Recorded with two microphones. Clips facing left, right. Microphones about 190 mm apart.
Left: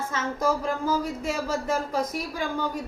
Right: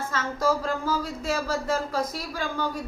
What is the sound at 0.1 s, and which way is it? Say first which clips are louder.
Speech: right 1 dB; 20° left (ahead or behind).